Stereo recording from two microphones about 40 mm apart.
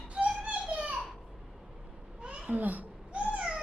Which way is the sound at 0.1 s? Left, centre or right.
Right.